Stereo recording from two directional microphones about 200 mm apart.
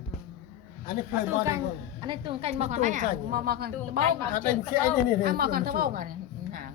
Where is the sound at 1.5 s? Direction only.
20° right (ahead or behind); by 4.0 s 50° right (ahead or behind).